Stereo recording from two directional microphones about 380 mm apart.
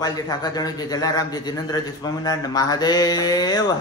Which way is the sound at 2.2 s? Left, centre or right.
Centre.